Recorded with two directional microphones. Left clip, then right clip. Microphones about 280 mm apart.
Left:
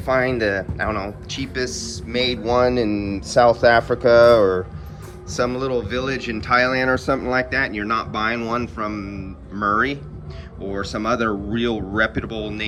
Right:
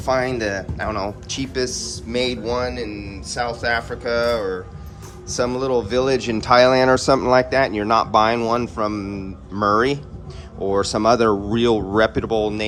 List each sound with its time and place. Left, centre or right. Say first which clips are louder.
0.0 s speech: left 1 dB; centre
5.3 s speech: right 2 dB; centre